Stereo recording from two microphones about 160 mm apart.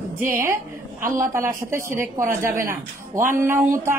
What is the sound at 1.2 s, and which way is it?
Speech, 15° right (ahead or behind).